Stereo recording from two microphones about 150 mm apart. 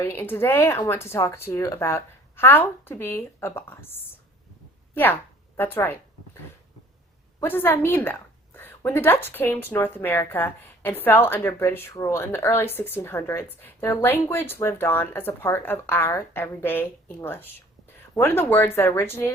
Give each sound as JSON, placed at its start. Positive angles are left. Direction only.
{"t": 0.0, "sound": "speech", "side_deg": 15}
{"t": 5.5, "sound": "speech", "side_deg": 15}
{"t": 7.3, "sound": "speech", "side_deg": 15}